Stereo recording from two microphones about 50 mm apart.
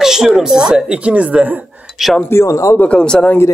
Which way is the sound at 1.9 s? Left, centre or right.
Centre.